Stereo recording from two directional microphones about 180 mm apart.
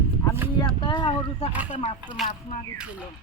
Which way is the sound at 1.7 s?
35° left (ahead or behind).